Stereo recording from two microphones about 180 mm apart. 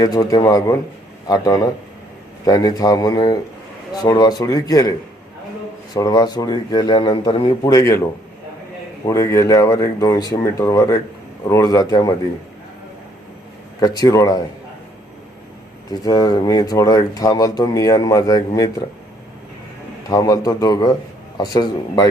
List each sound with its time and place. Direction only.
0.0 s speech: 20° left (ahead or behind)
9.0 s speech: 15° left (ahead or behind)
13.7 s speech: 20° left (ahead or behind)
15.9 s speech: 20° left (ahead or behind)
20.1 s speech: 20° left (ahead or behind)